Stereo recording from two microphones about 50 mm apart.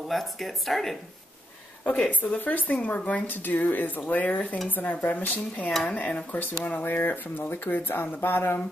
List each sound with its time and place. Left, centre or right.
0.1 s speech: centre
1.9 s speech: left